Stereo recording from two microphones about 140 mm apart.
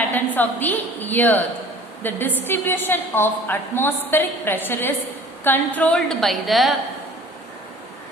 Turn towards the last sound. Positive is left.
turn(degrees=0)  # may be behind; listen again after turning